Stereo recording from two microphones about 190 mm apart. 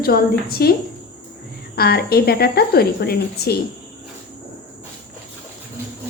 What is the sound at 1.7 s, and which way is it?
A woman's voice, 55° left (ahead or behind).